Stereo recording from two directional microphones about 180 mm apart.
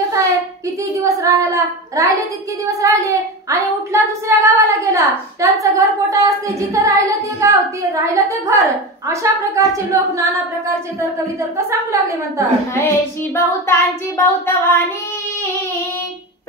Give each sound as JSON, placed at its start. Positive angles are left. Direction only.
{"t": 0.9, "sound": "a woman's voice", "side_deg": -15}
{"t": 11.5, "sound": "a woman's voice", "side_deg": -15}
{"t": 12.7, "sound": "child singing", "side_deg": 15}